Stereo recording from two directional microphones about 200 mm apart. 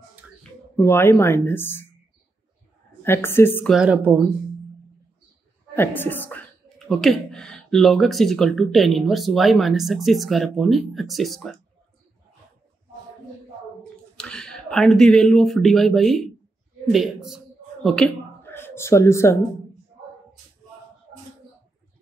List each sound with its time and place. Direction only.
0.4 s speech: 10° left (ahead or behind)
3.0 s a woman's voice: 10° left (ahead or behind)
3.7 s speech: 5° right (ahead or behind)
5.8 s a woman's voice: 10° left (ahead or behind)
14.1 s speech: 5° left (ahead or behind)